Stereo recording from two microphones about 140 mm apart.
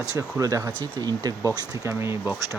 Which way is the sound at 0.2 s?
25° right (ahead or behind).